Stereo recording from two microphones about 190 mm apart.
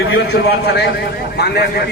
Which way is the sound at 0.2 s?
60° left (ahead or behind).